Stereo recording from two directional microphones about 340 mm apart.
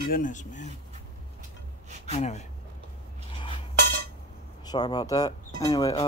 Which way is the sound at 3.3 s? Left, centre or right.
Centre.